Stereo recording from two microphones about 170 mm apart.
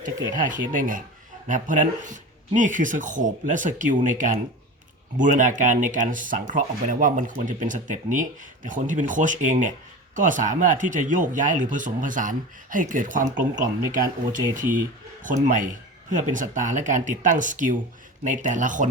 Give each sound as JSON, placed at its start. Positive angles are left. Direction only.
{"t": 0.0, "sound": "speech", "side_deg": -50}